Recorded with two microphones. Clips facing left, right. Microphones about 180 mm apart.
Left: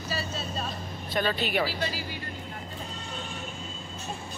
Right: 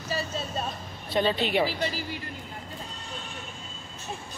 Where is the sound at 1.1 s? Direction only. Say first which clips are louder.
Right 3 dB; 25° right (ahead or behind).